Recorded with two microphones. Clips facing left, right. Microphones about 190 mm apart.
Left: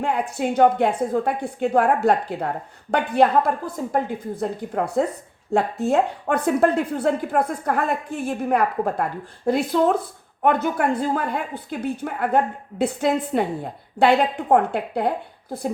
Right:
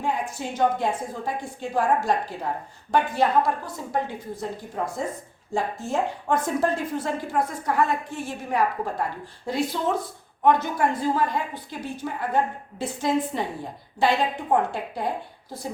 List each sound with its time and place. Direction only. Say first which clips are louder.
0.0 s a woman's voice: left 5 dB; 65° left (ahead or behind)